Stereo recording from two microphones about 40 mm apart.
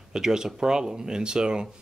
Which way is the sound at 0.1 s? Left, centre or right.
Centre.